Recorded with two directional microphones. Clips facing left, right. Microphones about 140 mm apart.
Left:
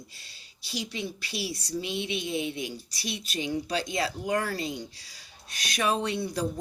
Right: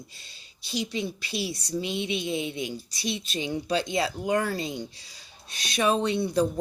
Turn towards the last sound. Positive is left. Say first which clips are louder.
# right 5 dB
turn(degrees=-25)  # may be behind; listen again after turning